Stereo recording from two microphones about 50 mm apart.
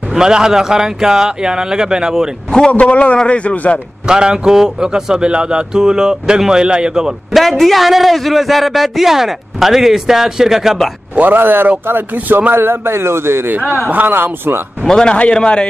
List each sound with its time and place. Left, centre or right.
0.1 s a man's voice: centre
2.7 s speech: left
4.1 s a man's voice: centre
7.3 s a man's voice: centre
11.1 s speech: right
12.5 s speech: right
13.5 s speech: right
14.9 s speech: centre